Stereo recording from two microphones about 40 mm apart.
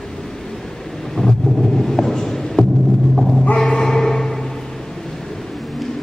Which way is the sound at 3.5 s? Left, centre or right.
Centre.